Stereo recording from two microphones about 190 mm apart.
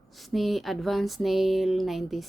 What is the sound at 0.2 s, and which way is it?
Speech, centre (ahead or behind).